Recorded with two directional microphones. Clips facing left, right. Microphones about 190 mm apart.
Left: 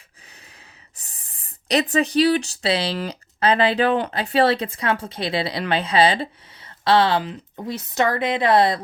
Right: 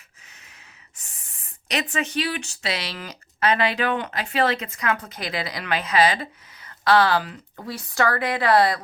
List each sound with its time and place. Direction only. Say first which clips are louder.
0.3 s gasp: left 4 dB; 35° left (ahead or behind)
0.9 s speech: left 2 dB; 35° left (ahead or behind)